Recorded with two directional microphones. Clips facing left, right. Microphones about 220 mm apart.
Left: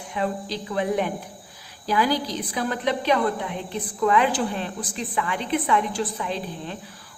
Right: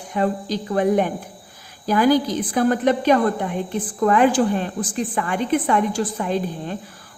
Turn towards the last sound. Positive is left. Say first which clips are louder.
# right 6 dB
turn(degrees=-45)  # may be behind; listen again after turning